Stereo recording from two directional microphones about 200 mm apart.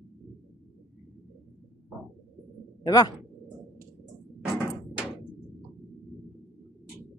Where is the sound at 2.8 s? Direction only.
20° left (ahead or behind).